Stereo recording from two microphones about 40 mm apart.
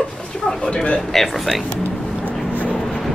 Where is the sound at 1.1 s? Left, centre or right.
Centre.